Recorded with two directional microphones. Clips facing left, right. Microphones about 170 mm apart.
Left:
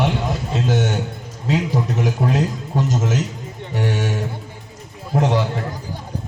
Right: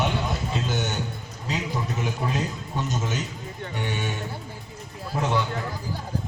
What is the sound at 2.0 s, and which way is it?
A man's voice, 85° left.